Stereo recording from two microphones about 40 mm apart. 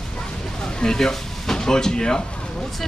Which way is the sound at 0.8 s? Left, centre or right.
Centre.